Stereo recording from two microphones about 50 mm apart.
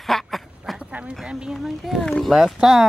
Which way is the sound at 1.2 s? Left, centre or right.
Centre.